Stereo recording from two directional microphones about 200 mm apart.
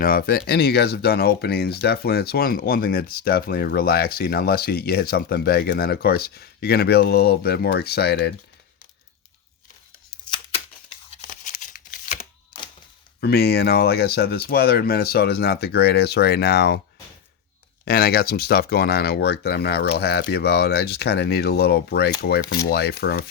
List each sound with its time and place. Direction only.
0.0 s speech: 45° left (ahead or behind)
11.4 s a sound: 40° left (ahead or behind)
13.1 s speech: 55° left (ahead or behind)
17.8 s speech: 50° left (ahead or behind)